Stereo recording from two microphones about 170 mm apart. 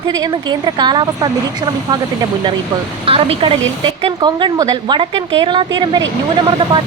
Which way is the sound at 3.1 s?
35° right (ahead or behind).